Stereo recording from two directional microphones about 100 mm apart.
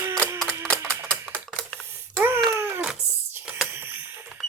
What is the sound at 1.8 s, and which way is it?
Babbling, 20° right (ahead or behind).